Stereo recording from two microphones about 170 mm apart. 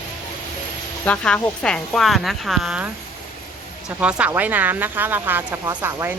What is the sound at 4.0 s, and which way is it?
Speech, 5° right (ahead or behind).